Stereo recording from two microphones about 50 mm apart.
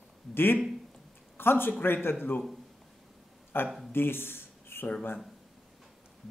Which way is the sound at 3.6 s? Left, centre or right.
Centre.